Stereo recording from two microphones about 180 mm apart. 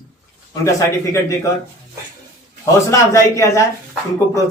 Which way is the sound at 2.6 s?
20° left (ahead or behind).